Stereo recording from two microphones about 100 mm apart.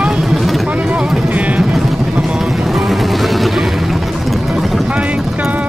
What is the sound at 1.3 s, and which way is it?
Music, 15° right (ahead or behind).